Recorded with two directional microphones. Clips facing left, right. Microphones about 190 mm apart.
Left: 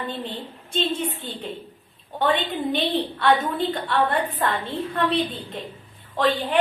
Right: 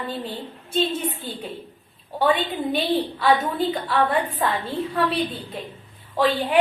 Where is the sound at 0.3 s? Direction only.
10° right (ahead or behind).